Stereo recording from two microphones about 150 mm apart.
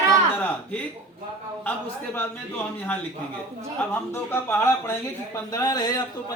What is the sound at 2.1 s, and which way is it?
Speech, 15° left (ahead or behind).